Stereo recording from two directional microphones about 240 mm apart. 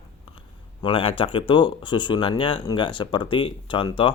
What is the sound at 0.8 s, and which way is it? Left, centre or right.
Speech, left.